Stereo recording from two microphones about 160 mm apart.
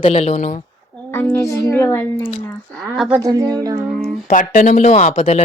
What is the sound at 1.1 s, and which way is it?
Speech, 10° left (ahead or behind).